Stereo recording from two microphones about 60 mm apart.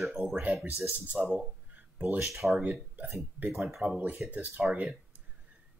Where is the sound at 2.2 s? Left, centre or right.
Centre.